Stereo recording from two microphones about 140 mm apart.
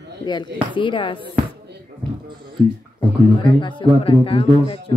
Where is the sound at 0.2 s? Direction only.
30° left (ahead or behind).